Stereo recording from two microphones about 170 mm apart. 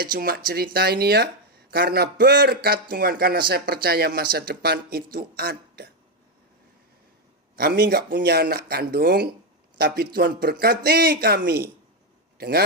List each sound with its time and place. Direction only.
0.0 s speech: 60° right (ahead or behind)
7.5 s a man's voice: 65° right (ahead or behind)